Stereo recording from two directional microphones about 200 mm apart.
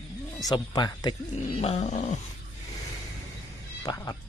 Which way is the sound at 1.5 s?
35° left (ahead or behind).